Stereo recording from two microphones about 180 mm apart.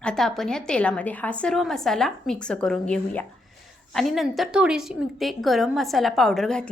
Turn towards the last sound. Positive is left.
turn(degrees=5)  # may be behind; listen again after turning